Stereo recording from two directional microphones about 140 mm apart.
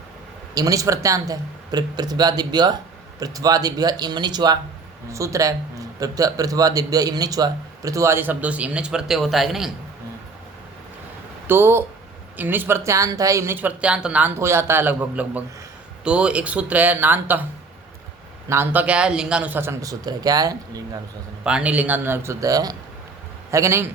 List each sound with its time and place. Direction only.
0.5 s speech: 25° right (ahead or behind); by 9.7 s centre (ahead or behind)
11.4 s speech: 15° right (ahead or behind)
18.4 s speech: 15° right (ahead or behind)
21.4 s speech: 10° right (ahead or behind)